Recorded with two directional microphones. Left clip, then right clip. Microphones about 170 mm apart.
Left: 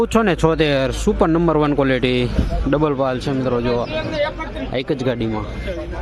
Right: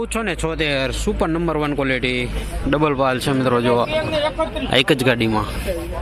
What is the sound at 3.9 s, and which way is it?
Speech, 50° right (ahead or behind).